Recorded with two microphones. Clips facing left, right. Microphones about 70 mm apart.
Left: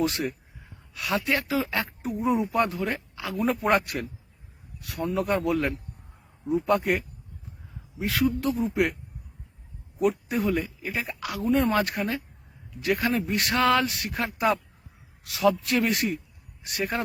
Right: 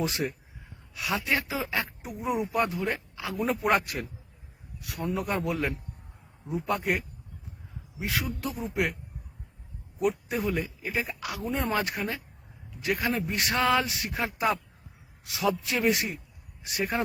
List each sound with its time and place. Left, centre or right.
0.0 s speech: centre
10.0 s speech: centre